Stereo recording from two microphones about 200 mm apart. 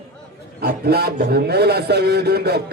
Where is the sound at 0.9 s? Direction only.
55° right (ahead or behind).